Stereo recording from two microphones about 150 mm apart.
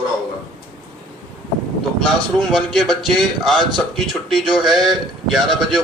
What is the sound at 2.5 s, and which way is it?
A man's voice, centre (ahead or behind).